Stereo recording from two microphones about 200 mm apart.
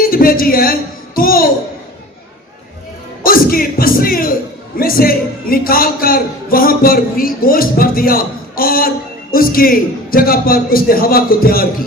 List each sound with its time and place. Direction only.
0.0 s a woman's voice: 45° left (ahead or behind)
3.2 s music: 45° left (ahead or behind)
4.8 s speech: 45° left (ahead or behind)